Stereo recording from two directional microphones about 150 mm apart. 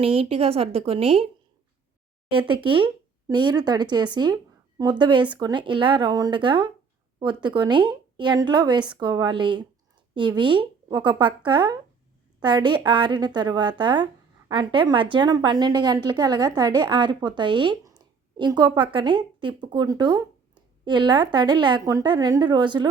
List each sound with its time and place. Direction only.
0.0 s a woman's voice: 40° right (ahead or behind)
2.5 s a woman's voice: 35° right (ahead or behind)